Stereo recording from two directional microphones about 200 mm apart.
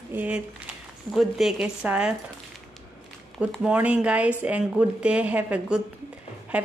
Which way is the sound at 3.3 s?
Centre (ahead or behind).